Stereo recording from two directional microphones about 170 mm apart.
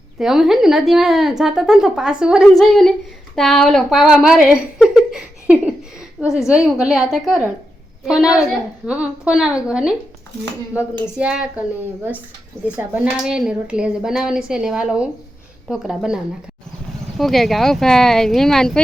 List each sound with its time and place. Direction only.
0.2 s a woman's voice: centre (ahead or behind)
6.2 s a woman's voice: 15° left (ahead or behind)
6.7 s a woman's voice: 5° right (ahead or behind)
11.2 s a woman's voice: 5° right (ahead or behind)
12.6 s a woman's voice: 10° right (ahead or behind)